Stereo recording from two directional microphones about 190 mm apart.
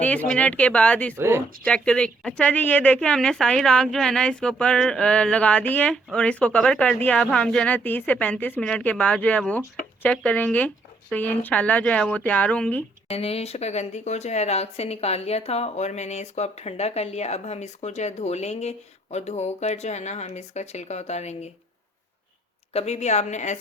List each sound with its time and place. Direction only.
0.0 s speech: 5° left (ahead or behind)
1.1 s speech: 15° right (ahead or behind)
1.6 s speech: 5° left (ahead or behind)
13.1 s speech: 30° left (ahead or behind)
22.7 s speech: 35° left (ahead or behind)